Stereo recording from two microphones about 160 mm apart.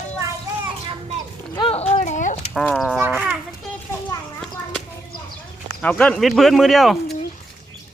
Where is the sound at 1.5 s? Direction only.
35° left (ahead or behind).